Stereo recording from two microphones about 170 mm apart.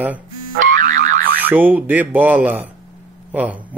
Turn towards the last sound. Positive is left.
turn(degrees=-10)  # may be behind; listen again after turning